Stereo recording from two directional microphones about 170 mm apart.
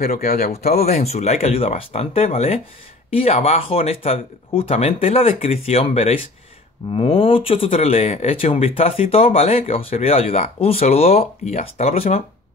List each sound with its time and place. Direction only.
0.0 s speech: 45° left (ahead or behind)